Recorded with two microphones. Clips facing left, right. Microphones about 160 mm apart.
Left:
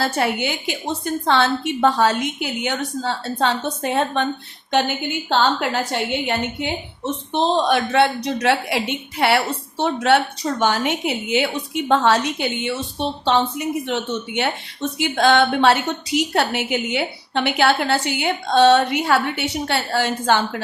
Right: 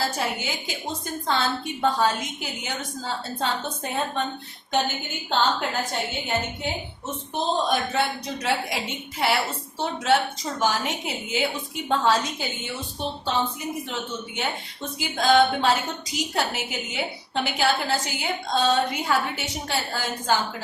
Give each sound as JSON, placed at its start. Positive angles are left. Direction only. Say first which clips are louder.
{"t": 0.0, "sound": "a woman's voice", "louder": "left 6 dB", "side_deg": 70}
{"t": 5.3, "sound": "a woman's voice", "louder": "left 4 dB", "side_deg": 75}